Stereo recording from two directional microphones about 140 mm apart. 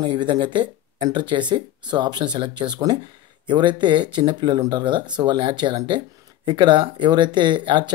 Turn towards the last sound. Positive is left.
turn(degrees=-35)  # may be behind; listen again after turning